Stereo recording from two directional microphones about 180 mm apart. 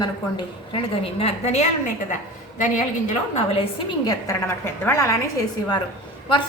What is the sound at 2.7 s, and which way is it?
A woman's voice, 40° left (ahead or behind).